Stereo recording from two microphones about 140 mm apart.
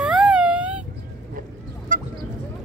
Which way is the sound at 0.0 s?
5° right (ahead or behind).